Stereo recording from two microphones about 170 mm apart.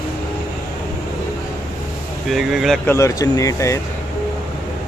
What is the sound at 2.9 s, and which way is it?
Speech, 20° left (ahead or behind).